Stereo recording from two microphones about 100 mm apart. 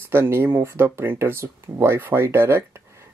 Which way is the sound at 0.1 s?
25° right (ahead or behind).